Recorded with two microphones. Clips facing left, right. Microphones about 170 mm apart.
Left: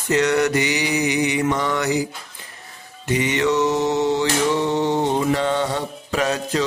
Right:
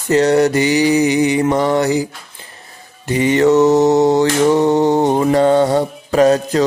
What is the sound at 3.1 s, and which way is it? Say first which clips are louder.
Mantra: right 7 dB; 35° right (ahead or behind).